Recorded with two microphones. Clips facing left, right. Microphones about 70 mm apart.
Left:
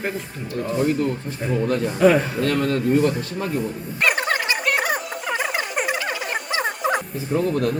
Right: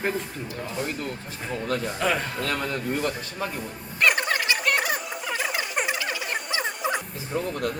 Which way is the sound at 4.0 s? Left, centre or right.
Centre.